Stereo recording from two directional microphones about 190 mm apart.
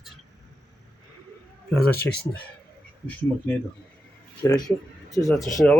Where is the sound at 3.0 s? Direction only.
10° left (ahead or behind).